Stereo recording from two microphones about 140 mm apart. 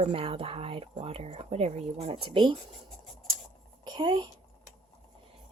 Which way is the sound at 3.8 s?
35° right (ahead or behind).